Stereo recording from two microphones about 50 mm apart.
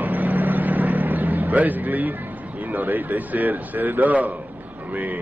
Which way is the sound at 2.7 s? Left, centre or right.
Right.